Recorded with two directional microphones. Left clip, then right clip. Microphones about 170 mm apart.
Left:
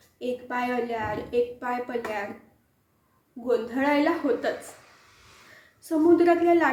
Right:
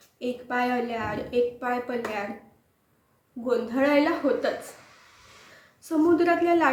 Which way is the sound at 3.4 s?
15° right (ahead or behind).